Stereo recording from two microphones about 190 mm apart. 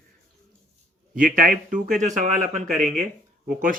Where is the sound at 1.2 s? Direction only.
45° right (ahead or behind).